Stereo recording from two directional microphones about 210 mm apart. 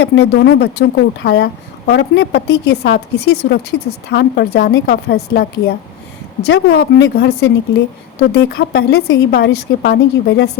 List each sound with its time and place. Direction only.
0.0 s speech: 50° left (ahead or behind)